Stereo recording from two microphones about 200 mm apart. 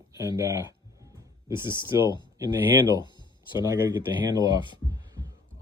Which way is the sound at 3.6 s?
20° right (ahead or behind).